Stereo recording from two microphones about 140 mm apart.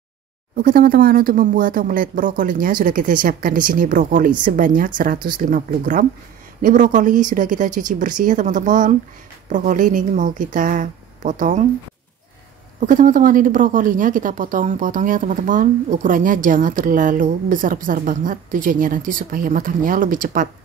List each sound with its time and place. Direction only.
0.6 s a woman's voice: 90° right; by 11.6 s 60° right (ahead or behind)
12.8 s a woman's voice: 70° right (ahead or behind)